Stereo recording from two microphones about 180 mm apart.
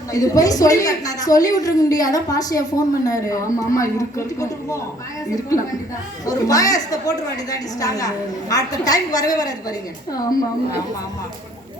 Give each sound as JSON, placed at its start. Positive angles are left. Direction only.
{"t": 0.1, "sound": "a woman's voice", "side_deg": 20}
{"t": 6.2, "sound": "a woman's voice", "side_deg": 20}